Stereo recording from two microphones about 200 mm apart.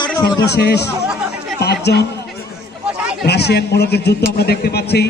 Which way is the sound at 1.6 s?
55° left (ahead or behind).